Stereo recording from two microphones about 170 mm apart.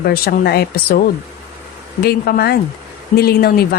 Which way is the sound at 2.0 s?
65° left (ahead or behind).